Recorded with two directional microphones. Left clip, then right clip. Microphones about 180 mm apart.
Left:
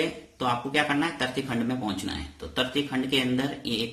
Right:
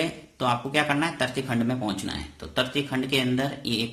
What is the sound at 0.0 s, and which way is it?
Speech, 35° right (ahead or behind).